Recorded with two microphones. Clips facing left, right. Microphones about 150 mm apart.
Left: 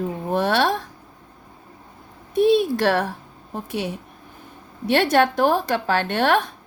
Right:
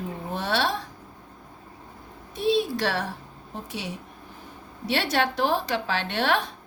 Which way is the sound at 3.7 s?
55° left (ahead or behind).